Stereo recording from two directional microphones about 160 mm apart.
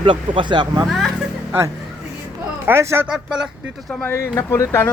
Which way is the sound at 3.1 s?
5° right (ahead or behind).